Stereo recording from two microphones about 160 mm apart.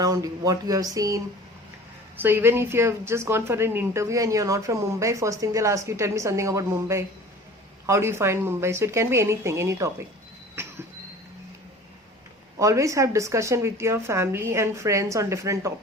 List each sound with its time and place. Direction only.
0.0 s a woman's voice: 20° right (ahead or behind)
10.5 s cough: 15° right (ahead or behind)
12.5 s a woman's voice: 20° right (ahead or behind)